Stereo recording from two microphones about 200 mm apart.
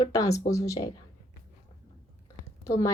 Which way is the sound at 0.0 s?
15° left (ahead or behind).